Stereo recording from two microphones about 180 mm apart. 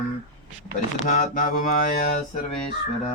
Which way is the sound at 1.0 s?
45° left (ahead or behind).